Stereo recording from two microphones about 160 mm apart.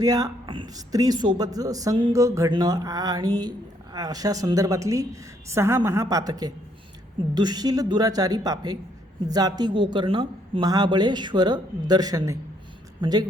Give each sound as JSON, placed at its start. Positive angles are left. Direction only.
{"t": 0.0, "sound": "a woman's voice", "side_deg": -25}